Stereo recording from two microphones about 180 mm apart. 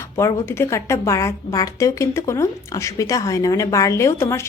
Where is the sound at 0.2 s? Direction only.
15° left (ahead or behind).